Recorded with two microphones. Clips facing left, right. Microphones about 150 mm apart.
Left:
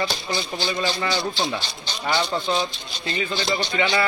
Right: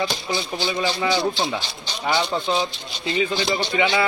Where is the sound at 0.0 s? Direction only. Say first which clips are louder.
Right 1 dB; 15° right (ahead or behind).